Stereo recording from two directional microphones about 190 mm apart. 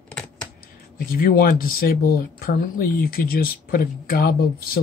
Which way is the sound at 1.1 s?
50° left (ahead or behind).